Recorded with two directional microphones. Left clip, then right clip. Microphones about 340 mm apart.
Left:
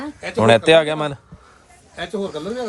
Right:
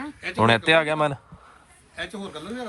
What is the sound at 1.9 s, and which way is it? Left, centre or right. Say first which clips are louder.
Speech: left 8 dB; left.